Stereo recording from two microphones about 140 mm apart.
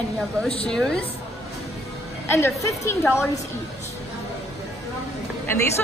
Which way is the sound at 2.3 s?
15° left (ahead or behind).